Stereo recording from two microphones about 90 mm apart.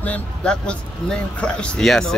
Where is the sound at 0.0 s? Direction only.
15° left (ahead or behind).